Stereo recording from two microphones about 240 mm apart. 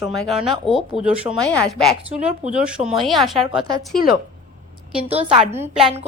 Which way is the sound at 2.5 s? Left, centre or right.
Centre.